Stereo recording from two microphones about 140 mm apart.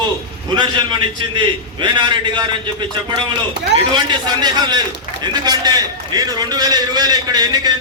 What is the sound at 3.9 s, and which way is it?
A man's voice, 30° right (ahead or behind).